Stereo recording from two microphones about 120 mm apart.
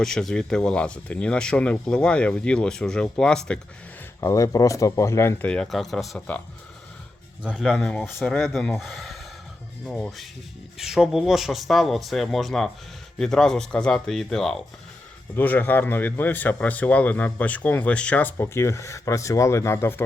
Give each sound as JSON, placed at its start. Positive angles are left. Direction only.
{"t": 0.0, "sound": "a man's voice", "side_deg": 5}
{"t": 4.2, "sound": "speech", "side_deg": 25}
{"t": 5.5, "sound": "speech", "side_deg": 5}
{"t": 7.4, "sound": "speech", "side_deg": -5}
{"t": 15.4, "sound": "a man's voice", "side_deg": 15}